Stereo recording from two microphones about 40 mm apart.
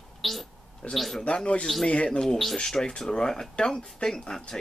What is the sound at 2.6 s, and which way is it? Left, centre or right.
Speech, centre.